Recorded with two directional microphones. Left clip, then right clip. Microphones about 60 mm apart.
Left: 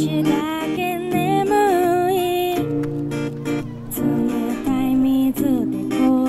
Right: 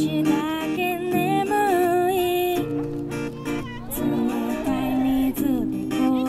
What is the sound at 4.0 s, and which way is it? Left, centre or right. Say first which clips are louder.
Music: left 3 dB; left.